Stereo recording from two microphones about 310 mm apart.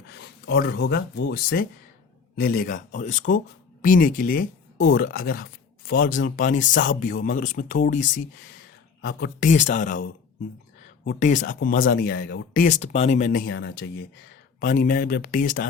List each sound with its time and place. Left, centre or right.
0.1 s speech: left